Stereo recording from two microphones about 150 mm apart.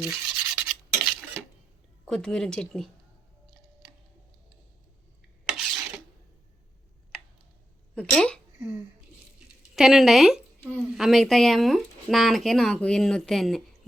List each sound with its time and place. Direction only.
0.0 s rub: 5° right (ahead or behind)
2.0 s speech: 5° left (ahead or behind)
5.5 s a sound: 5° right (ahead or behind)
7.9 s speech: 5° left (ahead or behind)
8.5 s a sound: 15° right (ahead or behind)
9.7 s speech: 5° right (ahead or behind)